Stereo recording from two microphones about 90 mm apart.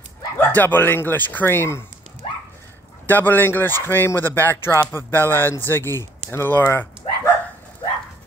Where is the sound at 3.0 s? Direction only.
20° left (ahead or behind).